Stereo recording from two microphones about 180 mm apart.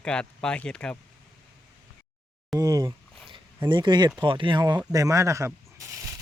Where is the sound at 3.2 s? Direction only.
25° right (ahead or behind).